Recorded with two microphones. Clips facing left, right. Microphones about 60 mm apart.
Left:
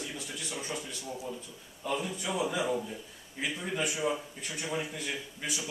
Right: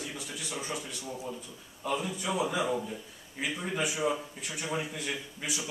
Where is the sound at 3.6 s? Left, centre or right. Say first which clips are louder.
Right 1 dB; centre.